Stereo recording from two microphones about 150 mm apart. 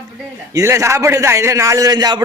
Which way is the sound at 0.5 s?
20° right (ahead or behind).